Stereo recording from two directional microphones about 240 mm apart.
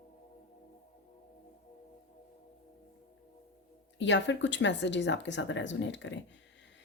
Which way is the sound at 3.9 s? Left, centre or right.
Left.